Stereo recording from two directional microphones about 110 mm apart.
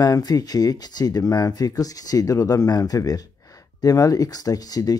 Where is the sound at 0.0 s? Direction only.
35° left (ahead or behind).